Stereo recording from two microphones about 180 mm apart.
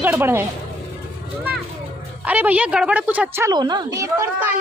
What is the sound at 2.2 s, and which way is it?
A woman's voice, 10° right (ahead or behind).